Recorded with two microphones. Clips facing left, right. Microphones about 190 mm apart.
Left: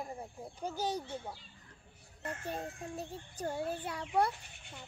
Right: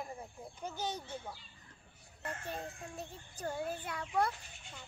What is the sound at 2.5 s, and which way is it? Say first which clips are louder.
A child's voice: left 3 dB; 35° left (ahead or behind).